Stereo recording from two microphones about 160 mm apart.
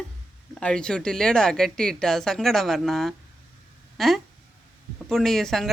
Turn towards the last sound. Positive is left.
turn(degrees=0)  # may be behind; listen again after turning